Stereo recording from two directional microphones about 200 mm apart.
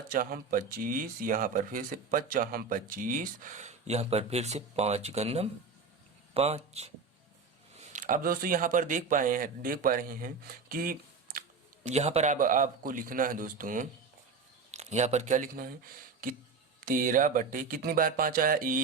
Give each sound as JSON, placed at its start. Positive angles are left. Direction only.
{"t": 0.1, "sound": "speech", "side_deg": -45}